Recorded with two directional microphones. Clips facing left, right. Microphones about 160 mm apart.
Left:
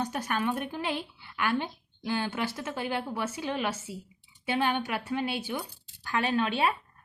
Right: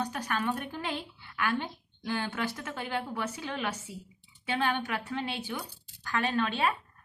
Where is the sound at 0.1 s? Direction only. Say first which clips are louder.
Left 2 dB; 20° left (ahead or behind).